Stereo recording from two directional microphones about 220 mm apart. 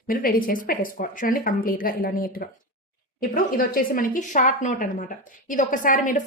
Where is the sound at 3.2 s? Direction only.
40° left (ahead or behind).